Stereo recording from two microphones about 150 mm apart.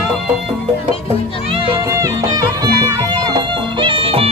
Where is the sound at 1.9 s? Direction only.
20° right (ahead or behind).